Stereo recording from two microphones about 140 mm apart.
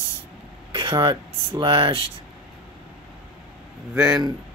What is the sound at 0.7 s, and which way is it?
Speech, 35° right (ahead or behind).